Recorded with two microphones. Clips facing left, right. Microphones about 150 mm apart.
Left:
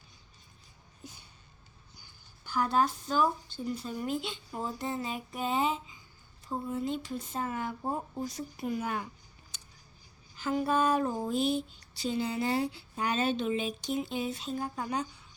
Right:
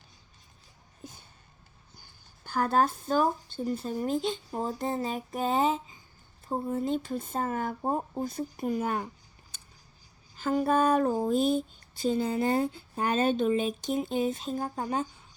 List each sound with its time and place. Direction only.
2.0 s speech: 50° right (ahead or behind)
10.3 s speech: 45° right (ahead or behind)